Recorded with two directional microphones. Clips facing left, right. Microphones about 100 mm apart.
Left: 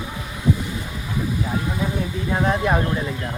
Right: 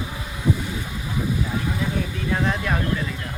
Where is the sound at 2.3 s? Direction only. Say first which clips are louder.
Left 4 dB; 25° left (ahead or behind).